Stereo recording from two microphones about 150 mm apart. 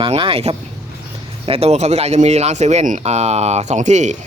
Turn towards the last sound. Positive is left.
turn(degrees=-55)  # may be behind; listen again after turning